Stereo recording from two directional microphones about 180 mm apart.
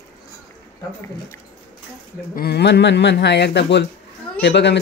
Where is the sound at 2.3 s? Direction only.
60° left (ahead or behind).